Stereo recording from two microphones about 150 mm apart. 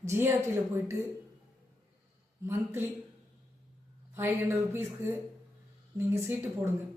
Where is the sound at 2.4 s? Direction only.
20° right (ahead or behind).